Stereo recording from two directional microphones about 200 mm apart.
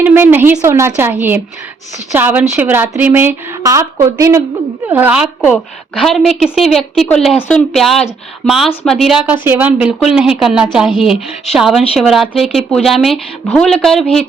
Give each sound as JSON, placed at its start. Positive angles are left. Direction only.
{"t": 0.0, "sound": "a woman's voice", "side_deg": -10}
{"t": 2.1, "sound": "a woman's voice", "side_deg": -10}